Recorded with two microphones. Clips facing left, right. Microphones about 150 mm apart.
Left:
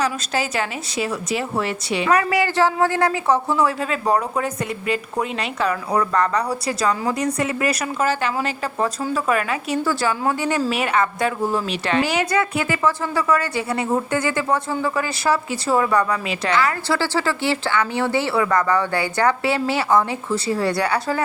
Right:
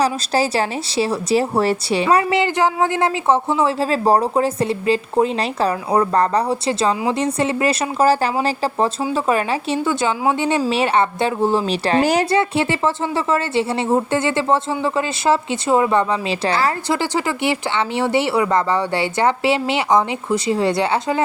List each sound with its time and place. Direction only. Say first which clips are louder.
0.0 s a woman's voice: right 5 dB; 35° right (ahead or behind)
16.5 s speech: even; 35° right (ahead or behind)
16.9 s a woman's voice: right 1 dB; 20° right (ahead or behind)